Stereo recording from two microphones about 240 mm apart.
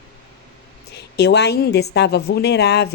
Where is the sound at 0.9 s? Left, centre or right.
Left.